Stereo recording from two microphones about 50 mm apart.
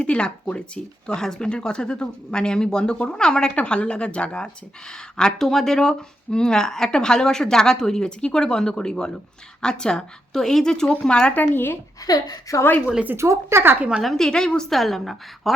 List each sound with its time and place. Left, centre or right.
0.0 s speech: left
11.3 s speech: left
12.5 s a woman's voice: left
13.1 s speech: right
14.0 s a woman's voice: centre
14.3 s speech: centre
14.7 s a woman's voice: centre